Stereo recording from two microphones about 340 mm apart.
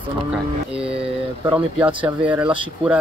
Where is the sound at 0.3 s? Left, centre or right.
Centre.